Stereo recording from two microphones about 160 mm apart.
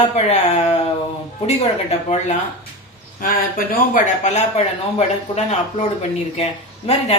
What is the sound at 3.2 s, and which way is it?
Speech, 60° left (ahead or behind).